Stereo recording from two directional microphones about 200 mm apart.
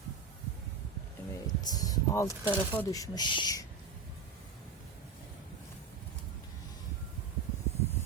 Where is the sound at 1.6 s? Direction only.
20° left (ahead or behind).